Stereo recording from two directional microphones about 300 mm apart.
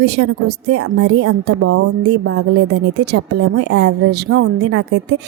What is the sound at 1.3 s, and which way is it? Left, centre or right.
Speech, right.